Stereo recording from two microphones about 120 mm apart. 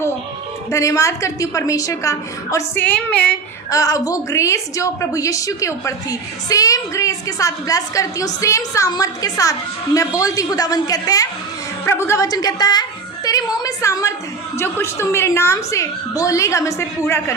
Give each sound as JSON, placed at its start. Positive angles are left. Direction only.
{"t": 0.7, "sound": "a woman's voice", "side_deg": 25}
{"t": 2.8, "sound": "a woman's voice", "side_deg": 10}
{"t": 3.7, "sound": "a woman's voice", "side_deg": 30}
{"t": 13.2, "sound": "a sound", "side_deg": 30}
{"t": 14.6, "sound": "a woman's voice", "side_deg": 20}